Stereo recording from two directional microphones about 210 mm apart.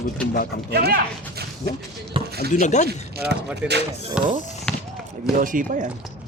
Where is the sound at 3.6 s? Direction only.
5° right (ahead or behind).